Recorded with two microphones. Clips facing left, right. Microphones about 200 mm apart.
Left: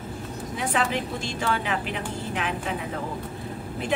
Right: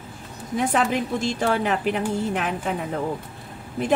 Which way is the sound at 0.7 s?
45° right (ahead or behind).